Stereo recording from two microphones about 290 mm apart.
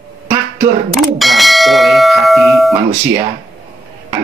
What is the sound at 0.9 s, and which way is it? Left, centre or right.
Speech, centre.